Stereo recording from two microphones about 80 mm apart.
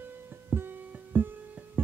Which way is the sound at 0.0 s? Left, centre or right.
Right.